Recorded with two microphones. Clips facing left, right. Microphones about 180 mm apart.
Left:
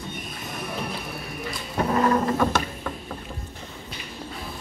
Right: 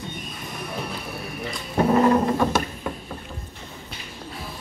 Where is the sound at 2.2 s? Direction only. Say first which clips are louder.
Right 1 dB; 5° right (ahead or behind).